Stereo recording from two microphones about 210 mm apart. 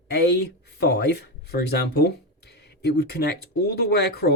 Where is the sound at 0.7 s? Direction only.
50° left (ahead or behind).